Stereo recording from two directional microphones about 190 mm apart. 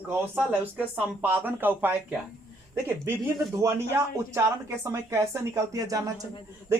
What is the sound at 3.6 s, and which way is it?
Speech, 15° right (ahead or behind).